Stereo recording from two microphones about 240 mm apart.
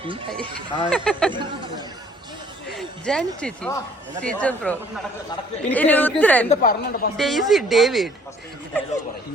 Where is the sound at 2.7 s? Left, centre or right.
Centre.